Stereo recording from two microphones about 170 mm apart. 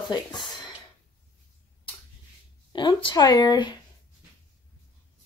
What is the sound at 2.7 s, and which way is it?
A woman's voice, 25° left (ahead or behind).